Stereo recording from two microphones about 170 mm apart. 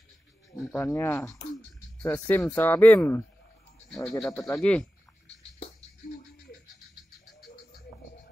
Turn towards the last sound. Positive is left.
turn(degrees=0)  # may be behind; listen again after turning